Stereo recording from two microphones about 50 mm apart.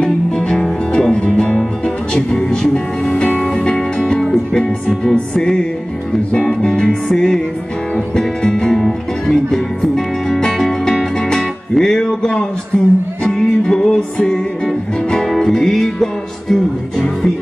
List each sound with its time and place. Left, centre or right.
0.0 s music: centre
3.1 s music: left
3.4 s music: centre